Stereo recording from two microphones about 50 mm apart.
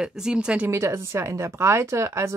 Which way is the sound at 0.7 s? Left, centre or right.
Right.